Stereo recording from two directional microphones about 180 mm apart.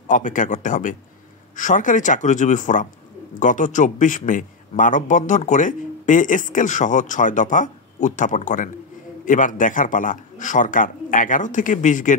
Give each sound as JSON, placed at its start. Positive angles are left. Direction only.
{"t": 0.1, "sound": "a man's voice", "side_deg": 45}